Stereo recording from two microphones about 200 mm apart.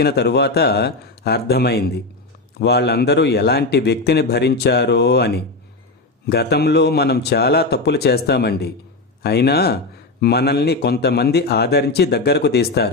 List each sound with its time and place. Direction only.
0.0 s a man's voice: 55° left (ahead or behind)